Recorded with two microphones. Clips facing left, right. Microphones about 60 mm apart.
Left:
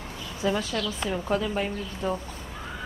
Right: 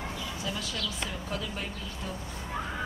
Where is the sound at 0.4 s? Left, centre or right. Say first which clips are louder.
Left 11 dB; left.